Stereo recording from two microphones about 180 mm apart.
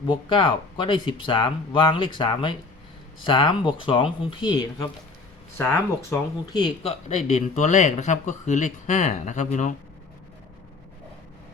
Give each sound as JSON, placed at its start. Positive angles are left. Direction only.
{"t": 0.1, "sound": "speech", "side_deg": 25}
{"t": 5.5, "sound": "speech", "side_deg": 10}
{"t": 6.1, "sound": "speech", "side_deg": 25}
{"t": 7.3, "sound": "a man's voice", "side_deg": 40}